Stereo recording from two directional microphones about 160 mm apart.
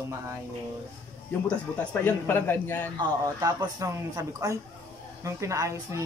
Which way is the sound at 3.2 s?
20° right (ahead or behind).